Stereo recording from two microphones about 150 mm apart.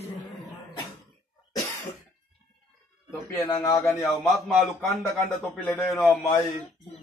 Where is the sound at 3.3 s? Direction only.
20° left (ahead or behind).